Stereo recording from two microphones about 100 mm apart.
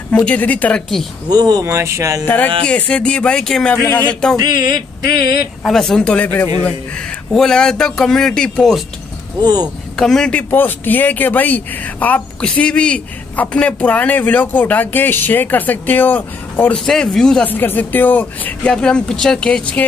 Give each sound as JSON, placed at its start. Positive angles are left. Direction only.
{"t": 0.1, "sound": "a man's voice", "side_deg": 10}
{"t": 1.3, "sound": "speech", "side_deg": -40}
{"t": 2.2, "sound": "a man's voice", "side_deg": 15}
{"t": 4.4, "sound": "a sound", "side_deg": -45}
{"t": 5.6, "sound": "a man's voice", "side_deg": 5}
{"t": 7.3, "sound": "a man's voice", "side_deg": 5}
{"t": 9.4, "sound": "a sound", "side_deg": -45}
{"t": 9.9, "sound": "a man's voice", "side_deg": 5}
{"t": 16.7, "sound": "speech", "side_deg": 5}
{"t": 17.5, "sound": "a man's voice", "side_deg": 20}